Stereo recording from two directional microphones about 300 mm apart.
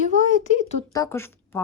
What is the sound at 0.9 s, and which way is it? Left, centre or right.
Speech, centre.